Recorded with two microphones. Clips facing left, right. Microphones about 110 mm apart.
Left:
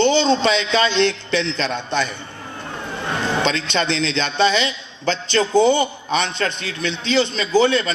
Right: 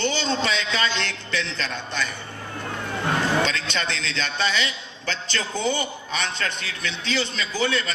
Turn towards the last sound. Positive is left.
turn(degrees=20)  # may be behind; listen again after turning